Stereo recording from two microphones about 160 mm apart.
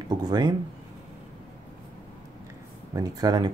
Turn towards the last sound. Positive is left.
turn(degrees=-25)  # may be behind; listen again after turning